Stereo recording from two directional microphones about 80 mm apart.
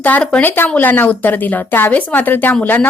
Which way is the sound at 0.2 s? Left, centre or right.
Centre.